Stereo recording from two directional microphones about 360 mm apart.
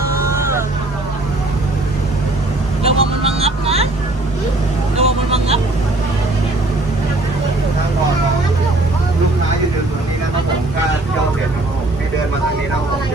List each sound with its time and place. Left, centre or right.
2.8 s vehicle: centre
4.9 s vehicle: centre